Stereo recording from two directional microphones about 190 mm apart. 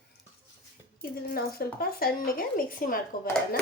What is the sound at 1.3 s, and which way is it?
Speech, 50° left (ahead or behind).